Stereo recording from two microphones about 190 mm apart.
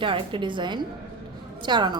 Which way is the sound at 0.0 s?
25° right (ahead or behind).